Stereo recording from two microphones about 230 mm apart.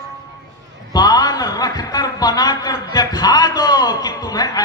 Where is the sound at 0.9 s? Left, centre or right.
Centre.